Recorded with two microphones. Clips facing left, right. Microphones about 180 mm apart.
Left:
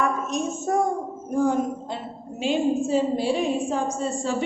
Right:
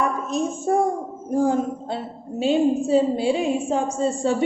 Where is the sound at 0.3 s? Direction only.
30° right (ahead or behind).